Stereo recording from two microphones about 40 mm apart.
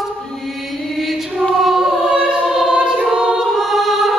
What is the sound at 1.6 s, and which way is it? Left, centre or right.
Choir, centre.